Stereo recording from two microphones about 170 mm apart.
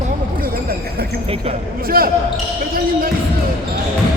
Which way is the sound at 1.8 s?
60° right (ahead or behind).